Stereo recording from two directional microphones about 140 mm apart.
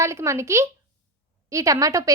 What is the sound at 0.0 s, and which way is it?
A woman's voice, 20° right (ahead or behind).